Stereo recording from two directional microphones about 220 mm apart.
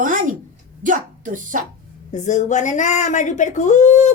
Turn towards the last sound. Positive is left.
turn(degrees=35)  # may be behind; listen again after turning